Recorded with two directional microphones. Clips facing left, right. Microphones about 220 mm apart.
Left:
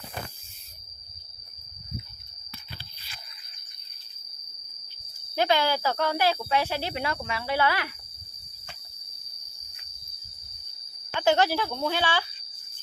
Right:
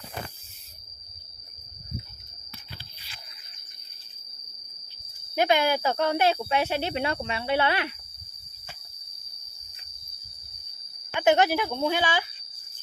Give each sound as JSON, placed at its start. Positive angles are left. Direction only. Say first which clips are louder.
{"t": 5.3, "sound": "speech", "louder": "right 2 dB", "side_deg": -20}
{"t": 11.1, "sound": "speech", "louder": "right 2 dB", "side_deg": -20}